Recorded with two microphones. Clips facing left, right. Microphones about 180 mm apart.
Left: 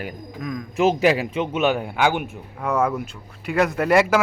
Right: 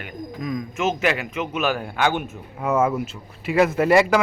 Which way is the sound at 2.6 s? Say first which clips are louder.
Right 1 dB; 5° right (ahead or behind).